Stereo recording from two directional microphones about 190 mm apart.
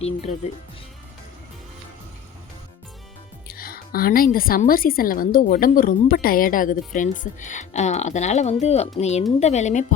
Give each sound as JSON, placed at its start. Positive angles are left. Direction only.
{"t": 3.4, "sound": "a woman's voice", "side_deg": 50}